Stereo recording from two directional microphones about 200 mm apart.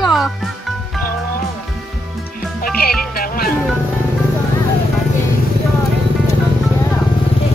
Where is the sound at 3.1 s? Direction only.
45° left (ahead or behind).